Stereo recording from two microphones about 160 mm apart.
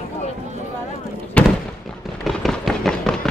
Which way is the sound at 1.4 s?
10° left (ahead or behind).